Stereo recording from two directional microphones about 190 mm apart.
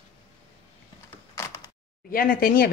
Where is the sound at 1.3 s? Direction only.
15° left (ahead or behind).